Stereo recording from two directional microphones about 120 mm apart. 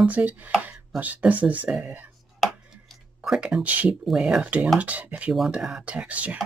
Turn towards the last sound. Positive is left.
turn(degrees=-10)  # may be behind; listen again after turning